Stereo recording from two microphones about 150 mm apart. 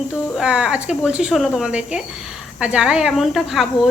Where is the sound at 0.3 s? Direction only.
5° right (ahead or behind).